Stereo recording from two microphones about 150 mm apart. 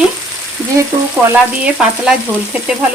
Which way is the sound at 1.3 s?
5° right (ahead or behind).